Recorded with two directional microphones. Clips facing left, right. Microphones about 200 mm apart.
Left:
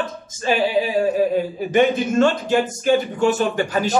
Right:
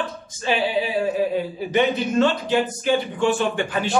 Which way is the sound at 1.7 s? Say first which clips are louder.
Left 3 dB; 45° left (ahead or behind).